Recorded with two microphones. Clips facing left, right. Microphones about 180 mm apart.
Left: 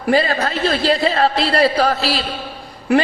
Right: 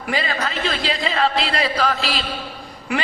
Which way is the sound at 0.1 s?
40° left (ahead or behind).